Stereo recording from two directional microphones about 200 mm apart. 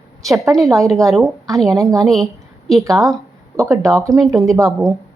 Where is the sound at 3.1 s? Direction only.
15° right (ahead or behind).